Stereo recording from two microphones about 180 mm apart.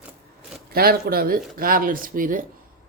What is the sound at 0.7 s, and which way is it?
Speech, 55° right (ahead or behind).